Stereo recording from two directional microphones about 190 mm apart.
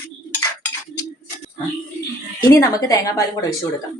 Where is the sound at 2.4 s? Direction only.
15° left (ahead or behind).